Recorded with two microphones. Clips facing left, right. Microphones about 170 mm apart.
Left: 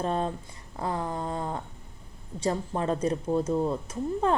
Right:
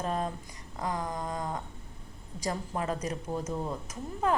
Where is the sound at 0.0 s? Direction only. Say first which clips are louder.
Left 4 dB; 30° left (ahead or behind).